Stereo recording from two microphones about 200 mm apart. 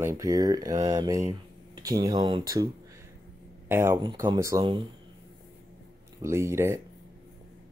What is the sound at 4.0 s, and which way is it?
Speech, 20° right (ahead or behind).